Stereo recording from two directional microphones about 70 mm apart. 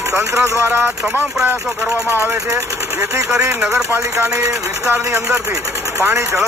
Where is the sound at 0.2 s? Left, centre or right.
Right.